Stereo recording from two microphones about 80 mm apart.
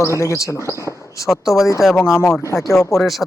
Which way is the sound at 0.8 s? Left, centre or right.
Left.